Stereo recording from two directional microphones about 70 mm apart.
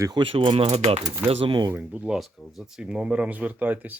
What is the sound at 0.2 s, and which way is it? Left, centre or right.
Speech, right.